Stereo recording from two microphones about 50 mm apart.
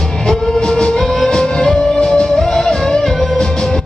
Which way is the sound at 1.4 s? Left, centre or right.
Centre.